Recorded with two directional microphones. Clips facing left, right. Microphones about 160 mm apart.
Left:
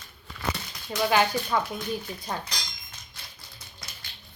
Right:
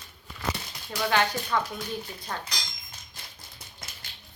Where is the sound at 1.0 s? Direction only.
10° left (ahead or behind).